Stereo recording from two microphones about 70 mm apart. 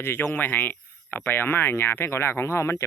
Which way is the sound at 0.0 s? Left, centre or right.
Left.